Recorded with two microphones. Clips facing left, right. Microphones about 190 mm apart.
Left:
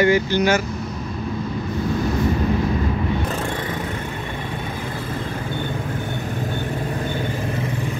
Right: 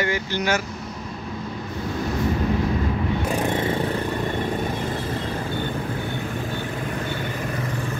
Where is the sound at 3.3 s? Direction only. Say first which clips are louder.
Right 3 dB; 20° right (ahead or behind).